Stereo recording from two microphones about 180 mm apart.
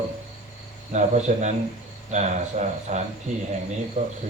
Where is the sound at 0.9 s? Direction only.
40° right (ahead or behind).